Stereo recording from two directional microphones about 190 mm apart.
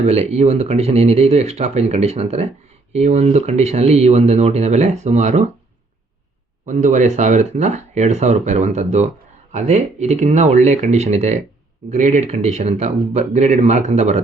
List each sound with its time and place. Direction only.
0.0 s speech: 35° right (ahead or behind)
6.7 s speech: 40° right (ahead or behind)